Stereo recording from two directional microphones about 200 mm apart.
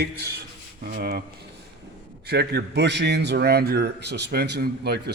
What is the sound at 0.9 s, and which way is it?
Speech, 50° right (ahead or behind).